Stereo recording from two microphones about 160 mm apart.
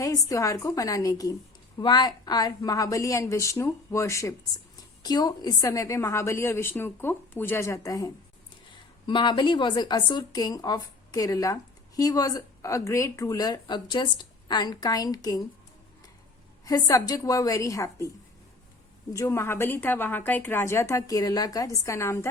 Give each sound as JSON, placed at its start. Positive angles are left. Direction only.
{"t": 0.0, "sound": "a woman's voice", "side_deg": 20}
{"t": 16.6, "sound": "speech", "side_deg": 20}
{"t": 19.1, "sound": "a woman's voice", "side_deg": 20}